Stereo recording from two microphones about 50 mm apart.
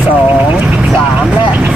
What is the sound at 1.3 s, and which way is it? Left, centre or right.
Vehicle, right.